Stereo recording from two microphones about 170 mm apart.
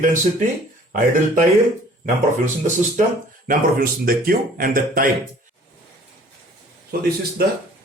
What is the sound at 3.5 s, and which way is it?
Speech, 60° right (ahead or behind).